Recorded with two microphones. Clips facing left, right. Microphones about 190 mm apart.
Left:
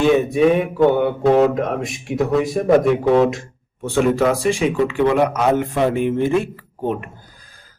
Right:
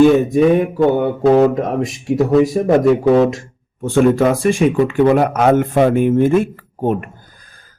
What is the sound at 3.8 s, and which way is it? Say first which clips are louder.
Speech: right 4 dB; 50° right (ahead or behind).